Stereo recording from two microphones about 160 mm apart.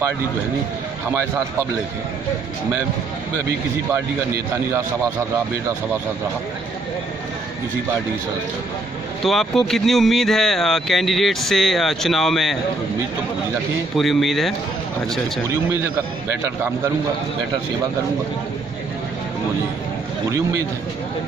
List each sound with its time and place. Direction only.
9.2 s speech: centre (ahead or behind)
13.9 s speech: centre (ahead or behind)
20.2 s a man's voice: 20° right (ahead or behind)